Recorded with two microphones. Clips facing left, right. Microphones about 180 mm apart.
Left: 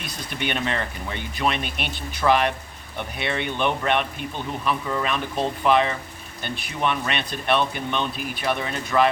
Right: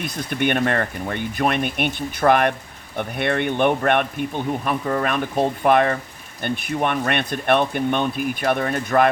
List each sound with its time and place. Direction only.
0.0 s speech: 50° right (ahead or behind)